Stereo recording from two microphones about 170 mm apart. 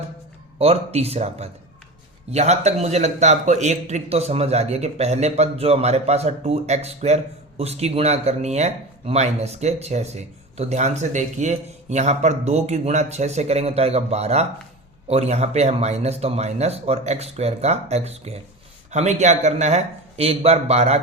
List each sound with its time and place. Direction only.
0.6 s speech: 35° right (ahead or behind)